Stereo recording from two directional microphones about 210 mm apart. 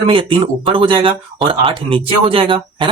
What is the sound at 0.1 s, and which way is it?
Speech, 25° right (ahead or behind).